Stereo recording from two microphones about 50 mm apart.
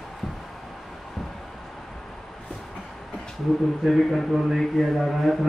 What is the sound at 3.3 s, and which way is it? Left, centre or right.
A man's voice, centre.